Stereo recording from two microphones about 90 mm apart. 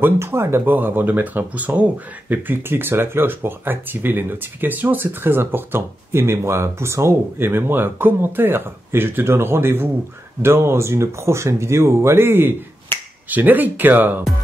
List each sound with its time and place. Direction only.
0.0 s speech: 25° right (ahead or behind)